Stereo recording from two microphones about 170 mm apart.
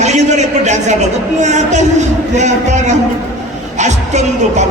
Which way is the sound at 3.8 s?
45° right (ahead or behind).